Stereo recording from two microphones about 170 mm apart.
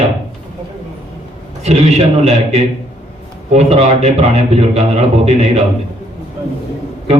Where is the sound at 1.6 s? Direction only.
35° right (ahead or behind).